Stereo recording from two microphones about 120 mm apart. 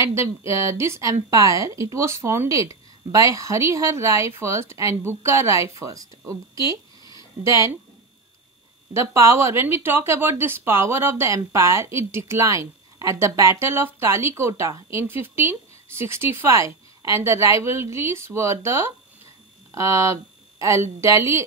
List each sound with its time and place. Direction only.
0.0 s speech: 25° right (ahead or behind)
8.9 s a woman's voice: 20° right (ahead or behind)